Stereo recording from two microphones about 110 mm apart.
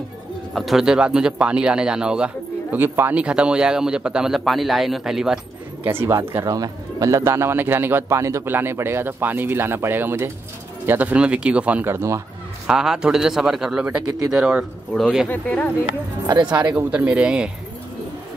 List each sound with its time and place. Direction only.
0.5 s a man's voice: centre (ahead or behind)
5.9 s a man's voice: 20° right (ahead or behind)
6.1 s a man's voice: 30° right (ahead or behind)
12.6 s speech: 5° right (ahead or behind)
15.2 s speech: 15° left (ahead or behind)
16.4 s a man's voice: 10° right (ahead or behind)